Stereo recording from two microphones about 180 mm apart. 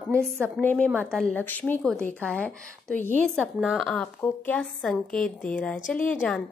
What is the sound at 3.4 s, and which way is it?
A woman's voice, centre (ahead or behind).